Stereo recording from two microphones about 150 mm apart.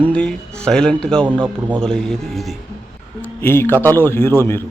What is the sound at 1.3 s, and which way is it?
Speech, 30° right (ahead or behind).